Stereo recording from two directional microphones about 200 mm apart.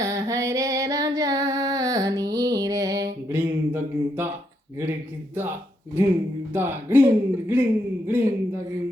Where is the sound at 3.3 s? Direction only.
10° right (ahead or behind).